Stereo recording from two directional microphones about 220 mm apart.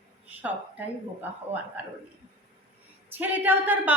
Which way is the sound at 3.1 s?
10° right (ahead or behind).